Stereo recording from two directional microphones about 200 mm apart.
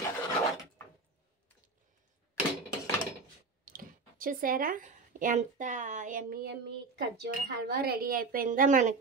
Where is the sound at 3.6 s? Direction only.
45° right (ahead or behind).